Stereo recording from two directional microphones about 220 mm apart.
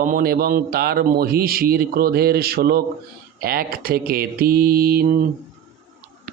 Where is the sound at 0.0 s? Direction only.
40° right (ahead or behind).